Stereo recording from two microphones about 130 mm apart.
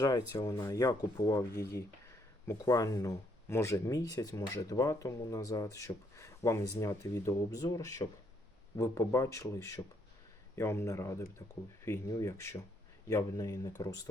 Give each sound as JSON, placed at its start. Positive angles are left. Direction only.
{"t": 0.0, "sound": "speech", "side_deg": 30}